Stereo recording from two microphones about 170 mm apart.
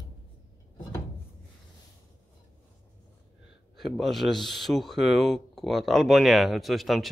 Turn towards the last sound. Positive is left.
turn(degrees=0)  # may be behind; listen again after turning